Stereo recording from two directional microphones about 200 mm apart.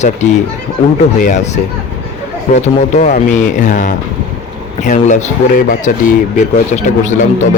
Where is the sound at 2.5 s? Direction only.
35° left (ahead or behind).